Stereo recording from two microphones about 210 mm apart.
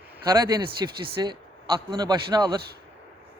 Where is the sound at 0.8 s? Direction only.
15° right (ahead or behind).